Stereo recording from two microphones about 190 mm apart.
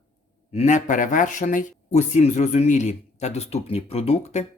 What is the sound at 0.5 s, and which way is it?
Speech, 40° left (ahead or behind).